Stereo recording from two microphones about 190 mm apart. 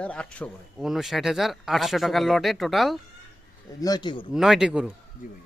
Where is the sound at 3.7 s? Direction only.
20° left (ahead or behind).